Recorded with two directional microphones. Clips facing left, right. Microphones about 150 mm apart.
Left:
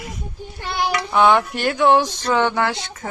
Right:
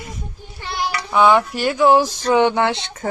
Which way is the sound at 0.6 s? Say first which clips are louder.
Left 2 dB; 55° left (ahead or behind).